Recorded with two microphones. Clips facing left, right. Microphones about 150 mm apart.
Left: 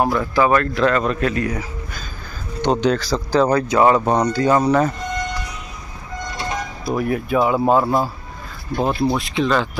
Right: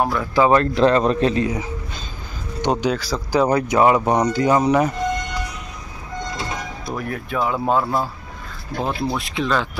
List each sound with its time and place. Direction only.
0.0 s speech: 5° left (ahead or behind)
0.3 s a man's voice: 20° right (ahead or behind)
2.6 s speech: 10° right (ahead or behind)
3.4 s speech: 20° right (ahead or behind)
6.9 s speech: 10° left (ahead or behind)